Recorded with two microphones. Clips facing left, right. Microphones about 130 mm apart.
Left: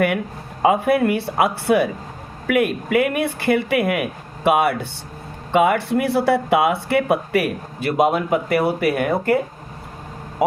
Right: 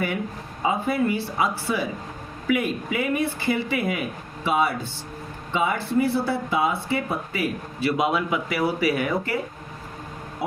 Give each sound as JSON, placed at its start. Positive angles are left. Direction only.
{"t": 0.6, "sound": "speech", "side_deg": 65}